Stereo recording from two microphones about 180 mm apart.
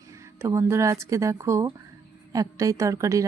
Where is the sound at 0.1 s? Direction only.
15° right (ahead or behind).